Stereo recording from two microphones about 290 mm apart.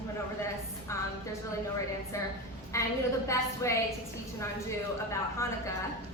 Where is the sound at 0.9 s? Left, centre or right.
Centre.